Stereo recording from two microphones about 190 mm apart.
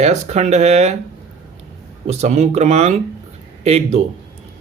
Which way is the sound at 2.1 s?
35° right (ahead or behind).